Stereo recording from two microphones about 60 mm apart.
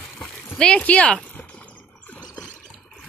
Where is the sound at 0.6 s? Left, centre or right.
Centre.